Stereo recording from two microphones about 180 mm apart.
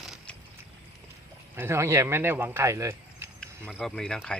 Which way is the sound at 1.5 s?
15° right (ahead or behind).